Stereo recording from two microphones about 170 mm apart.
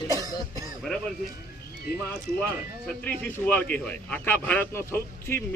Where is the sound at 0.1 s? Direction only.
20° right (ahead or behind).